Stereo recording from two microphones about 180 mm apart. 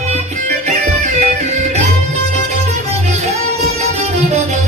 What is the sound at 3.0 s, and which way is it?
Music, 40° right (ahead or behind).